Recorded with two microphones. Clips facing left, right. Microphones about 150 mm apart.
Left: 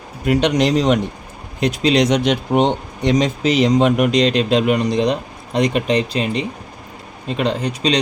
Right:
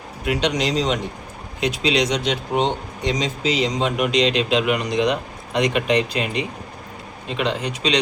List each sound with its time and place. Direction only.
0.3 s speech: 50° left (ahead or behind)
1.6 s speech: 45° left (ahead or behind)